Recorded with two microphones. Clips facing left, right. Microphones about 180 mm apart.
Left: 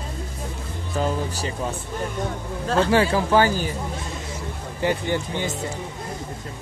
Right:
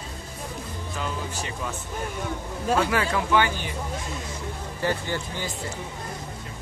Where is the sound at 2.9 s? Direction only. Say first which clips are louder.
Left 5 dB; 30° left (ahead or behind).